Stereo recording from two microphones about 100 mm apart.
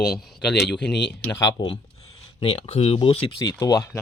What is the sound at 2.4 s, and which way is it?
Speech, 65° left (ahead or behind).